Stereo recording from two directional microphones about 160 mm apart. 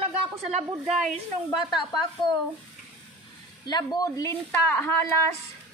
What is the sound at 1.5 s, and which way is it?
Speech, 25° left (ahead or behind).